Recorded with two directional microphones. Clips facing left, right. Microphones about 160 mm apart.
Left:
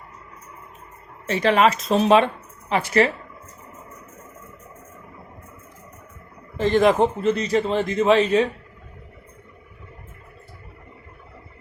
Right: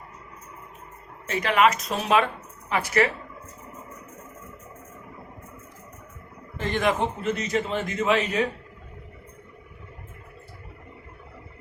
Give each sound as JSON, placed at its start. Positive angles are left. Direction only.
{"t": 1.3, "sound": "a woman's voice", "side_deg": 30}
{"t": 6.6, "sound": "a man's voice", "side_deg": 35}